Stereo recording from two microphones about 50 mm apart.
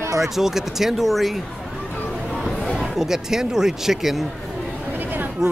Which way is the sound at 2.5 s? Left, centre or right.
Centre.